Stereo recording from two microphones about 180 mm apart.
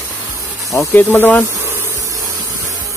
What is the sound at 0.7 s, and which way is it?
Speech, 15° left (ahead or behind).